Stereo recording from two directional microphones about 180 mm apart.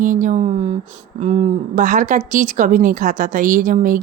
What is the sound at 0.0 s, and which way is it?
A woman's voice, 45° right (ahead or behind).